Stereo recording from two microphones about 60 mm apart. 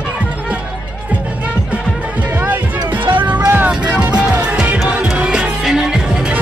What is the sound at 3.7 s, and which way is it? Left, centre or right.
Music, centre.